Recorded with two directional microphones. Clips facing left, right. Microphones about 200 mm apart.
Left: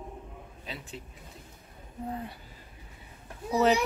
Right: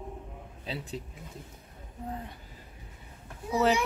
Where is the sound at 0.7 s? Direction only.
35° right (ahead or behind).